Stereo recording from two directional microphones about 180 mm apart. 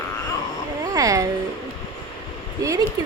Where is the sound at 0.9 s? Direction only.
20° right (ahead or behind).